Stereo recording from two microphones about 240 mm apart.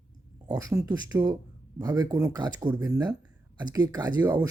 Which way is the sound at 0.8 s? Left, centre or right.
Centre.